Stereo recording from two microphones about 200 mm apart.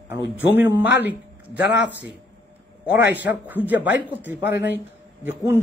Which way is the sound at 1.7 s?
60° left (ahead or behind).